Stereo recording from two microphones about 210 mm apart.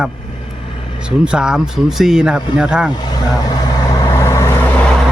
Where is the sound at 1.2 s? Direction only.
5° right (ahead or behind).